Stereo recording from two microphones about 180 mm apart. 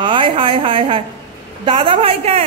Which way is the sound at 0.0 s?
30° right (ahead or behind).